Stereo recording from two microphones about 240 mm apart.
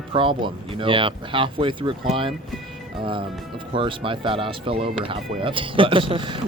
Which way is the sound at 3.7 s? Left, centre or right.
Right.